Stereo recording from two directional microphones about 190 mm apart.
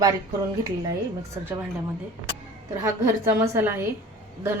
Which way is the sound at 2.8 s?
15° right (ahead or behind).